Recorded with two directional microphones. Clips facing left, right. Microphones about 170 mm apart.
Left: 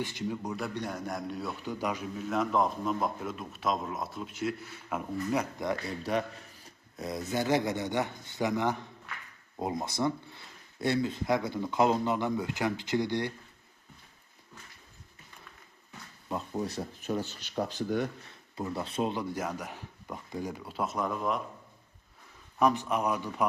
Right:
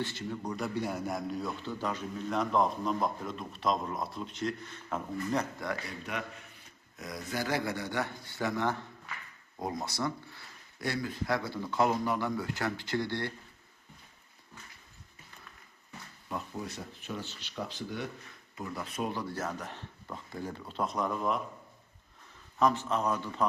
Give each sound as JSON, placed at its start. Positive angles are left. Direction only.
{"t": 0.0, "sound": "speech", "side_deg": 15}
{"t": 1.6, "sound": "speech", "side_deg": 10}
{"t": 6.0, "sound": "speech", "side_deg": 35}
{"t": 16.3, "sound": "speech", "side_deg": 35}
{"t": 18.5, "sound": "speech", "side_deg": 30}
{"t": 22.5, "sound": "speech", "side_deg": 15}